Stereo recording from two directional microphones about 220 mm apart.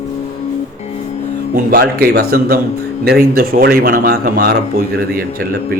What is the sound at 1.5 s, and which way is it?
Speech, 45° right (ahead or behind).